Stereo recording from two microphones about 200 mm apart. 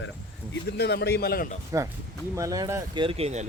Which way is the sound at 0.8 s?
55° left (ahead or behind).